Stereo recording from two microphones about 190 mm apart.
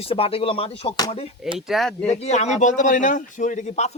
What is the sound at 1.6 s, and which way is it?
Speech, centre (ahead or behind).